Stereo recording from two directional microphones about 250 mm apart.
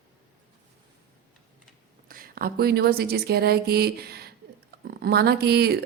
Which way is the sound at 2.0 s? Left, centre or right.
Right.